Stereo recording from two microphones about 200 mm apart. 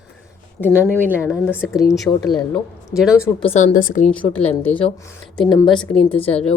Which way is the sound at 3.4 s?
35° left (ahead or behind).